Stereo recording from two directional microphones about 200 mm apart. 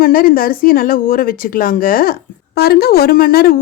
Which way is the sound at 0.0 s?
45° left (ahead or behind).